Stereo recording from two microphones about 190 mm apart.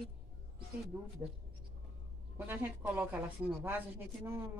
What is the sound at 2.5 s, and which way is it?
A woman's voice, 10° right (ahead or behind).